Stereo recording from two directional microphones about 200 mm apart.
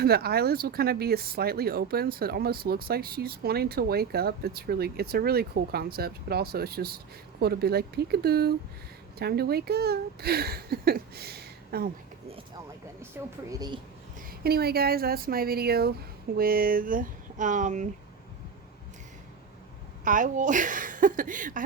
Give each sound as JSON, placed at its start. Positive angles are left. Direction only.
{"t": 0.0, "sound": "speech", "side_deg": -50}
{"t": 13.2, "sound": "a woman's voice", "side_deg": -10}
{"t": 14.3, "sound": "speech", "side_deg": -50}
{"t": 20.1, "sound": "a woman's voice", "side_deg": -40}